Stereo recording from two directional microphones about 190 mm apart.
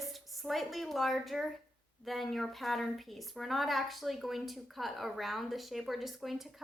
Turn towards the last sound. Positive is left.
turn(degrees=0)  # may be behind; listen again after turning